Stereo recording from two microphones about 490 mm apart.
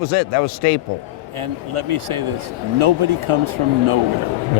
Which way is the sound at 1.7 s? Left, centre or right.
Right.